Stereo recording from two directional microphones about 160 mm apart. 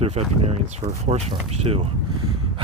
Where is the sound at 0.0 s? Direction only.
40° right (ahead or behind).